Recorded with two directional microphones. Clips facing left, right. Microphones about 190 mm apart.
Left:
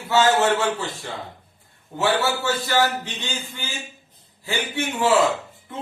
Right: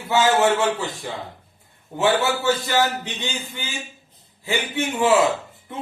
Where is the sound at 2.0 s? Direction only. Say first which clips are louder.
Right 2 dB; 15° right (ahead or behind).